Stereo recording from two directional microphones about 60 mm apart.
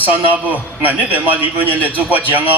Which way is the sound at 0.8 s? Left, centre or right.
Right.